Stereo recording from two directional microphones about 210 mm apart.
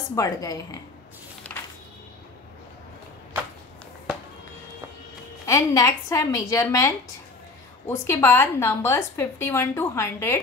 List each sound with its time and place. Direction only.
0.1 s a woman's voice: 15° left (ahead or behind)
1.5 s a sound: 10° left (ahead or behind)
5.5 s a woman's voice: 15° left (ahead or behind)